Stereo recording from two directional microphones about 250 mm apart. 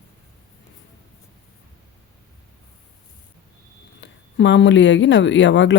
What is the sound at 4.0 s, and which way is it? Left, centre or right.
Speech, left.